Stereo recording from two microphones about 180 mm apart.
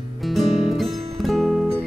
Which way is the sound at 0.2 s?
Centre (ahead or behind).